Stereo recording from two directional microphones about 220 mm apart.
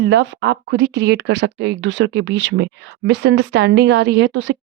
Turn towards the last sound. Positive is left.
turn(degrees=-55)  # may be behind; listen again after turning